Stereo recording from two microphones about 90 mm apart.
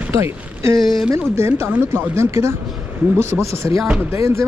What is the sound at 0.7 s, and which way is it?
Speech, centre (ahead or behind).